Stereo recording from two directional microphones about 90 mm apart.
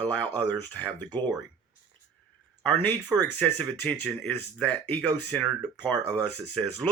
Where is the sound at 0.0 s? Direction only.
20° left (ahead or behind).